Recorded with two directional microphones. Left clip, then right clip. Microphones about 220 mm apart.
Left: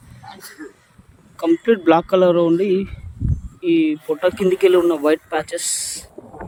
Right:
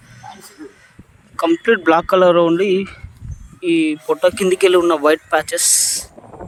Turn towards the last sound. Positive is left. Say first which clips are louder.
# right 6 dB
turn(degrees=5)  # may be behind; listen again after turning